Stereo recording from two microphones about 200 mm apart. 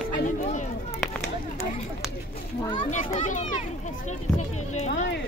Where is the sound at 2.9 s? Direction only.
40° left (ahead or behind).